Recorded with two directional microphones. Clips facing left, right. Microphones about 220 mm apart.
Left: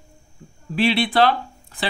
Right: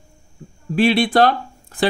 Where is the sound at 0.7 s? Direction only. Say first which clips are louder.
Right 3 dB; 45° right (ahead or behind).